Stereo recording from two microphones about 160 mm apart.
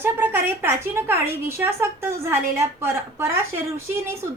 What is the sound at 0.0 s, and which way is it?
A woman's voice, 15° right (ahead or behind).